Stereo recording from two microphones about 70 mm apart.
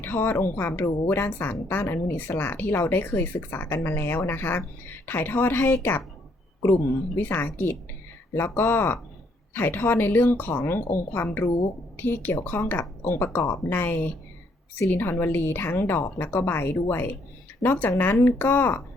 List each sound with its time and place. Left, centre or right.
0.0 s a woman's voice: left
7.2 s a woman's voice: left